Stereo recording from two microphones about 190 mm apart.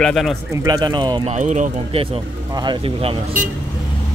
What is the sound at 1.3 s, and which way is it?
Speech, 40° right (ahead or behind).